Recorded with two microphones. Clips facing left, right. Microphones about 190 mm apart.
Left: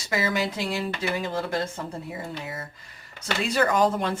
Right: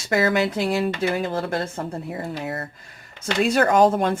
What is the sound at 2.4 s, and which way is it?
Speech, 65° right (ahead or behind).